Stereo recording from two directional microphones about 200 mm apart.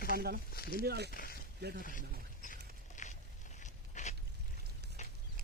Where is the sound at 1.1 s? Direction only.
45° left (ahead or behind).